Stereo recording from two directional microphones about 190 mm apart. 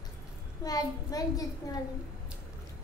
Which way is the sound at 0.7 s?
20° left (ahead or behind).